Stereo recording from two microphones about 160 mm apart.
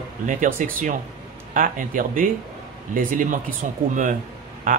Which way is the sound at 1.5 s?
55° right (ahead or behind).